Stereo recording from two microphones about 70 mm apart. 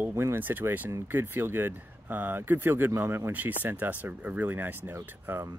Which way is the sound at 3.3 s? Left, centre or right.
Right.